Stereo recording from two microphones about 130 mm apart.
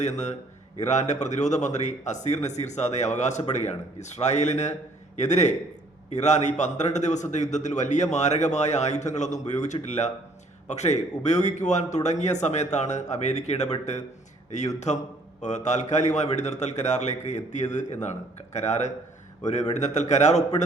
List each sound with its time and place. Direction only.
0.0 s a man's voice: 60° left (ahead or behind)
15.4 s a man's voice: 65° left (ahead or behind)